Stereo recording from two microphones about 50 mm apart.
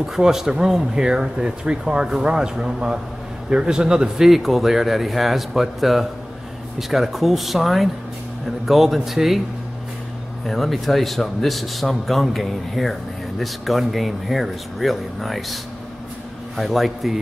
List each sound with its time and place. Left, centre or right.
0.0 s speech: centre
4.3 s a man's voice: centre
10.4 s a man's voice: centre